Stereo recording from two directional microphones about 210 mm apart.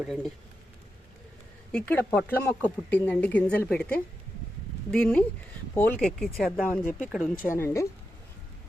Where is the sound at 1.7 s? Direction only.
10° left (ahead or behind).